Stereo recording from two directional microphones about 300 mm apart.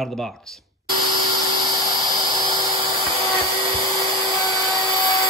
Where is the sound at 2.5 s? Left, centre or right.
Centre.